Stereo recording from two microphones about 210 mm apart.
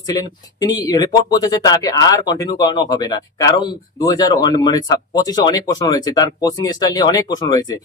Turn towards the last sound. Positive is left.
turn(degrees=20)  # may be behind; listen again after turning